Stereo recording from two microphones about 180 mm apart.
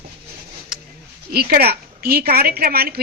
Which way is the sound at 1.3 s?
60° right (ahead or behind).